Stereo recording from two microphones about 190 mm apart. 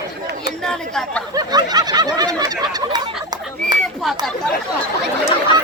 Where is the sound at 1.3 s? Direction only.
20° right (ahead or behind).